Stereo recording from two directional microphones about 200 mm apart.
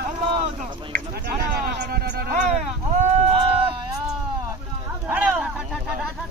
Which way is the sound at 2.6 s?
35° right (ahead or behind).